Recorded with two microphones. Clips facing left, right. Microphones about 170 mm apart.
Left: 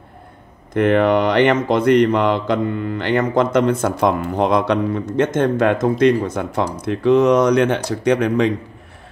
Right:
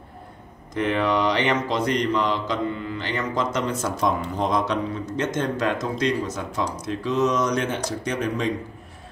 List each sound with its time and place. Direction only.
0.7 s speech: 60° left (ahead or behind)